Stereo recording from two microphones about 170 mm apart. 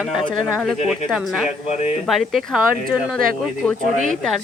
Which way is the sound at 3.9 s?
45° right (ahead or behind).